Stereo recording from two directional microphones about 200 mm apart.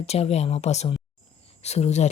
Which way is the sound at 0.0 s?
30° left (ahead or behind).